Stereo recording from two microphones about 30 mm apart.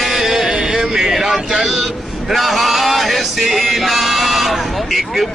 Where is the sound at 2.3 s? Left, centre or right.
Centre.